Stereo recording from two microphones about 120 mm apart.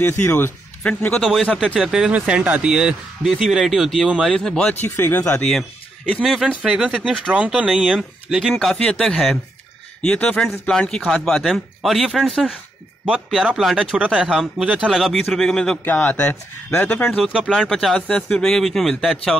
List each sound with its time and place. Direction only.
0.0 s speech: 20° left (ahead or behind)
1.2 s speech: centre (ahead or behind)
4.8 s speech: 15° left (ahead or behind)
5.4 s speech: centre (ahead or behind)
15.8 s speech: 15° left (ahead or behind)
17.2 s speech: 5° right (ahead or behind)